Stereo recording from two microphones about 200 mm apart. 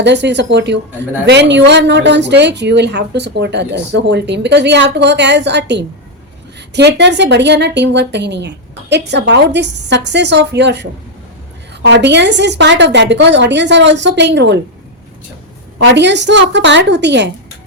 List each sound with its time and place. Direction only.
0.0 s speech: 60° right (ahead or behind)
15.8 s speech: 60° right (ahead or behind)